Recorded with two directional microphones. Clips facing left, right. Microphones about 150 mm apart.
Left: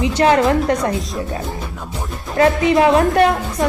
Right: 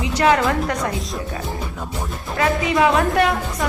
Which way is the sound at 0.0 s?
25° left (ahead or behind).